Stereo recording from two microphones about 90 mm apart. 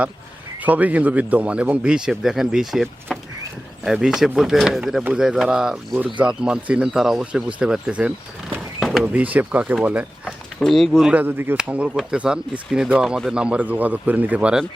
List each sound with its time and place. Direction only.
0.6 s speech: 20° right (ahead or behind)
3.1 s a sound: centre (ahead or behind)
3.8 s speech: 5° right (ahead or behind)
8.8 s a sound: centre (ahead or behind)
9.1 s speech: 20° right (ahead or behind)
10.6 s speech: 5° left (ahead or behind)
11.1 s speech: 20° right (ahead or behind)